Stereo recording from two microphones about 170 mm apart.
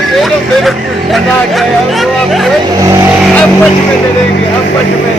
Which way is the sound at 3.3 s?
10° left (ahead or behind).